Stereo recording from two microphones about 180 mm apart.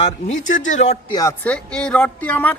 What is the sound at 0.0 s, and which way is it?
Speech, 40° left (ahead or behind).